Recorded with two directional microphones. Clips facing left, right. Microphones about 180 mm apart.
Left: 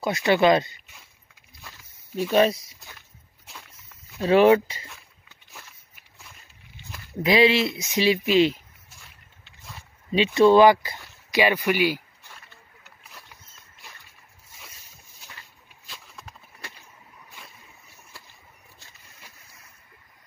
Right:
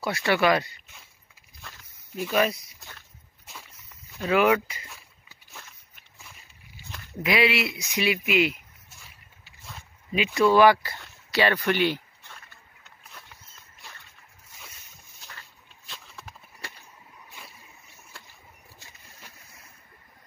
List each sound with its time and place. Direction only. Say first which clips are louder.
0.0 s speech: left 4 dB; 20° left (ahead or behind)
2.3 s speech: left 5 dB; 30° left (ahead or behind)
3.4 s rowboat: even; centre (ahead or behind)
4.2 s speech: left 5 dB; 30° left (ahead or behind)
4.8 s a sound: left 1 dB; 5° right (ahead or behind)
7.2 s speech: left 5 dB; 25° left (ahead or behind)
9.0 s vehicle: even; centre (ahead or behind)
10.1 s speech: left 4 dB; 30° left (ahead or behind); by 12.4 s 10° left (ahead or behind)
12.8 s rowboat: right 1 dB; 5° left (ahead or behind)
15.9 s a sound: even; centre (ahead or behind)